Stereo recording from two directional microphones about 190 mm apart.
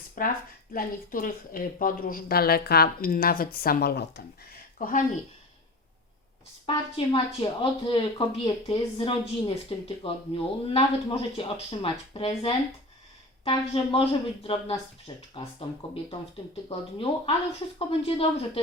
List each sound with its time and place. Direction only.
0.2 s speech: 45° left (ahead or behind)
4.8 s speech: 45° left (ahead or behind)
6.7 s speech: 25° left (ahead or behind)
16.6 s speech: 30° left (ahead or behind)